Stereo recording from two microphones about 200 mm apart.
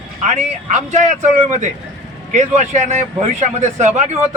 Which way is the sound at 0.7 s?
35° right (ahead or behind).